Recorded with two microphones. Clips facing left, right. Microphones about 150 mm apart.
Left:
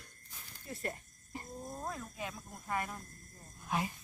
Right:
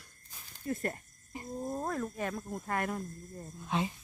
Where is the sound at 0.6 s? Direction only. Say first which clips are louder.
Right 6 dB; 45° right (ahead or behind).